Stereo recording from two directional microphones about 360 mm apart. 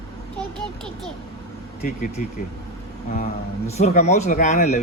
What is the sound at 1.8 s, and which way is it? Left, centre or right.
Speech, centre.